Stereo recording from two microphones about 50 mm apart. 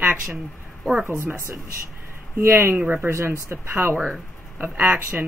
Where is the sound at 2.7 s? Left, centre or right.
Right.